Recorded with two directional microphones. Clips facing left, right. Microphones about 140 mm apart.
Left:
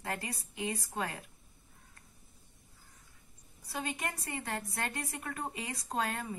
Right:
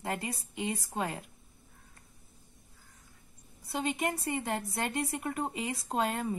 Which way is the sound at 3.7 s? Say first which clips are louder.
Right 6 dB; 20° right (ahead or behind).